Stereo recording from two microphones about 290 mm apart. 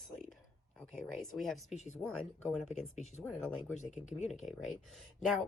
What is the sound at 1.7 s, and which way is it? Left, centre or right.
Speech, left.